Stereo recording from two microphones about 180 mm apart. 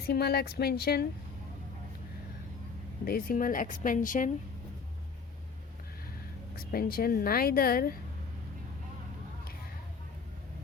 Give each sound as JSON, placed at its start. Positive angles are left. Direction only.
{"t": 0.0, "sound": "a woman's voice", "side_deg": 60}
{"t": 3.0, "sound": "speech", "side_deg": 55}
{"t": 6.6, "sound": "a woman's voice", "side_deg": 55}